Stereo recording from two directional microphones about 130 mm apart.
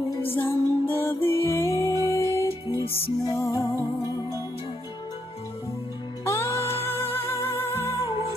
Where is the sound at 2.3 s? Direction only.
25° right (ahead or behind).